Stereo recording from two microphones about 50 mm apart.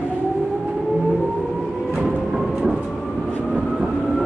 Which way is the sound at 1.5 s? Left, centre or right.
Centre.